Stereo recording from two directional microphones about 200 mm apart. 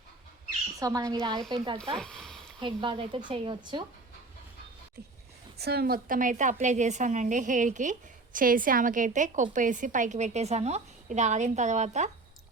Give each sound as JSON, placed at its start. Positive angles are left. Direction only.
{"t": 0.8, "sound": "a woman's voice", "side_deg": -15}
{"t": 2.0, "sound": "a sound", "side_deg": 5}
{"t": 2.6, "sound": "speech", "side_deg": -25}
{"t": 5.5, "sound": "a woman's voice", "side_deg": -55}